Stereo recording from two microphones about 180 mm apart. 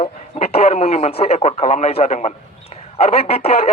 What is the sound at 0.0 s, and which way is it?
A man's voice, 35° left (ahead or behind).